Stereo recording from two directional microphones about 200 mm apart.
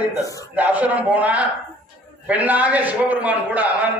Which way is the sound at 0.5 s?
5° right (ahead or behind).